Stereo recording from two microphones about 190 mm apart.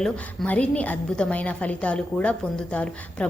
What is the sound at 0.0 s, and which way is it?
A woman's voice, 5° left (ahead or behind).